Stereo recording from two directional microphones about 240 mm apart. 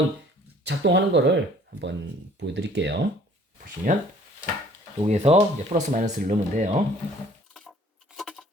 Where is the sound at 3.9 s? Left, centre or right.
Right.